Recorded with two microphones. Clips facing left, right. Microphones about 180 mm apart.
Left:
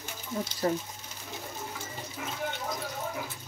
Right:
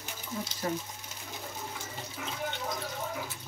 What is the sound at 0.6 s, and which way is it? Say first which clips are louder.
Speech: left 5 dB; 40° left (ahead or behind).